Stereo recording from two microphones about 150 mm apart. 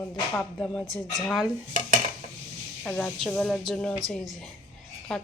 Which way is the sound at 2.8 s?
10° left (ahead or behind).